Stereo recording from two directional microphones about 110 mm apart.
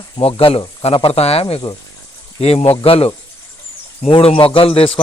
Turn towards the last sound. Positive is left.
turn(degrees=55)  # may be behind; listen again after turning